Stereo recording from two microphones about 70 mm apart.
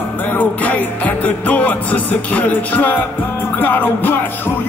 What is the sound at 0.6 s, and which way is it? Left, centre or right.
Music, left.